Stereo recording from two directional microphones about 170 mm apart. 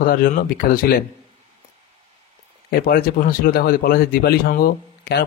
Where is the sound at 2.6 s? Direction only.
60° left (ahead or behind).